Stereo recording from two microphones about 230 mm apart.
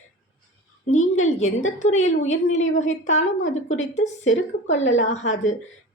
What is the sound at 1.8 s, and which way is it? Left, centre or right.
A woman's voice, left.